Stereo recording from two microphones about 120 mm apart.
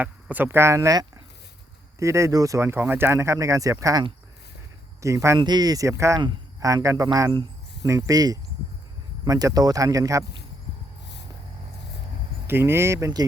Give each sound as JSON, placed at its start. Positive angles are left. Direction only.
{"t": 0.0, "sound": "speech", "side_deg": -15}
{"t": 5.4, "sound": "speech", "side_deg": -35}
{"t": 12.5, "sound": "speech", "side_deg": -20}